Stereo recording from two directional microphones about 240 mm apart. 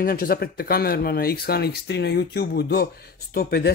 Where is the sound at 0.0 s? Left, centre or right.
Left.